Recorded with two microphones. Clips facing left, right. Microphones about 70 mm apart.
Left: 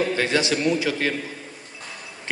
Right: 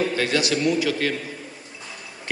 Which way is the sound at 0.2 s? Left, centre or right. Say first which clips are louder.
Even; left.